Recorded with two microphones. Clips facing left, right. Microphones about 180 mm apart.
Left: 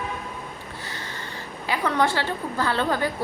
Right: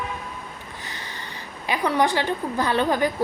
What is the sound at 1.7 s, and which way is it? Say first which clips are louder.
A woman's voice: right 2 dB; 15° right (ahead or behind).